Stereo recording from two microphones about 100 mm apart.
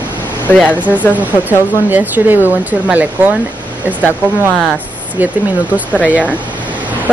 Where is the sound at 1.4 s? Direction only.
20° right (ahead or behind).